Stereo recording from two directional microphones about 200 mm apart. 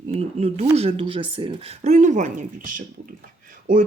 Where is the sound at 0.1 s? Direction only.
30° right (ahead or behind).